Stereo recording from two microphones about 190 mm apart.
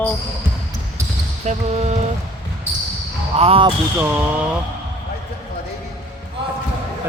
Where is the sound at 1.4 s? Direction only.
35° right (ahead or behind).